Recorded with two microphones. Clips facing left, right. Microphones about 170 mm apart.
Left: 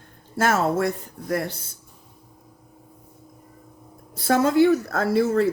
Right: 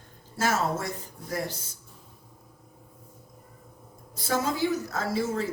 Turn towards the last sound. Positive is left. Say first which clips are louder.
# left 8 dB
turn(degrees=65)  # may be behind; listen again after turning